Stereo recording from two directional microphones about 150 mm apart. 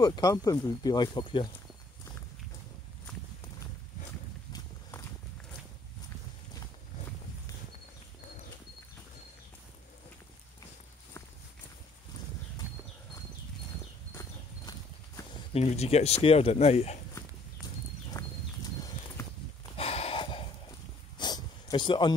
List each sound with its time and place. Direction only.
0.0 s speech: 25° left (ahead or behind)
14.7 s clip-clop: 25° left (ahead or behind)
15.5 s speech: 45° left (ahead or behind)
18.1 s clip-clop: 25° left (ahead or behind)
19.2 s livestock: 20° left (ahead or behind)
19.8 s a sound: 40° left (ahead or behind)